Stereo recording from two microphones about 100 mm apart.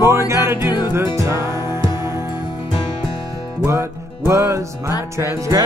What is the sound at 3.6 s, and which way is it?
Music, 25° right (ahead or behind).